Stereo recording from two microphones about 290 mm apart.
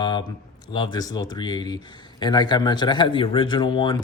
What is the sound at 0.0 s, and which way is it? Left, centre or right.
A man's voice, centre.